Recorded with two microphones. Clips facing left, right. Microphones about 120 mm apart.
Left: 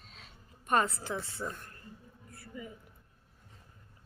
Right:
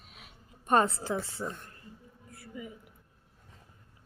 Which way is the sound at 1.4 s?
10° right (ahead or behind).